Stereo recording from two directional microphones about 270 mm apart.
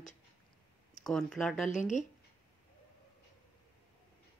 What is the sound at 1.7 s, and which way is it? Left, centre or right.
Speech, left.